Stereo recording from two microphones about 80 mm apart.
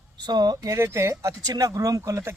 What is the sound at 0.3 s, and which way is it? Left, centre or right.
Speech, right.